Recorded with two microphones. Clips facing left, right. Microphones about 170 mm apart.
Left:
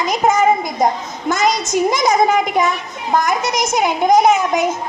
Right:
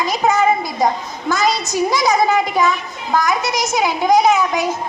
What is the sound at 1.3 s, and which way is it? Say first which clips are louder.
Speech: left 1 dB; 20° left (ahead or behind).